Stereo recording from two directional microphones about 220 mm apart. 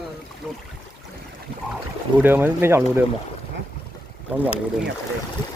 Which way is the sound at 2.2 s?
10° right (ahead or behind).